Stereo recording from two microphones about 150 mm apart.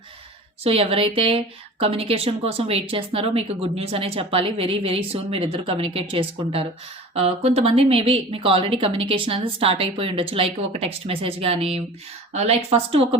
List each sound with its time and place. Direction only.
0.6 s a woman's voice: 40° right (ahead or behind)